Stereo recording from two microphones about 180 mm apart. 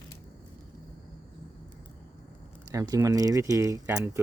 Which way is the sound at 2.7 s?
15° right (ahead or behind).